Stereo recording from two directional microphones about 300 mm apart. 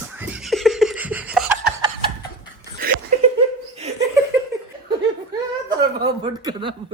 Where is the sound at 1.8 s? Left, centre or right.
Centre.